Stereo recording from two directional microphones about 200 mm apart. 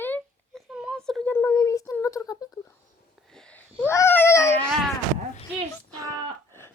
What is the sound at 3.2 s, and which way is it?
Babbling, 5° left (ahead or behind).